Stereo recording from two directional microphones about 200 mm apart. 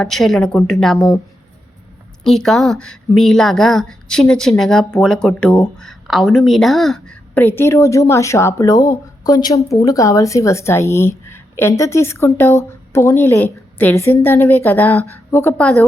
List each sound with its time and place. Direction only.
0.0 s speech: centre (ahead or behind)
0.9 s a woman's voice: 15° left (ahead or behind)
2.2 s a woman's voice: centre (ahead or behind)